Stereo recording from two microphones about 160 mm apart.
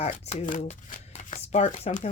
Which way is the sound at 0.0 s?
45° left (ahead or behind).